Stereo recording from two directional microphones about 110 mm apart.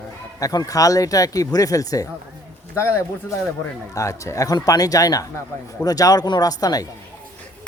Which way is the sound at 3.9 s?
30° left (ahead or behind).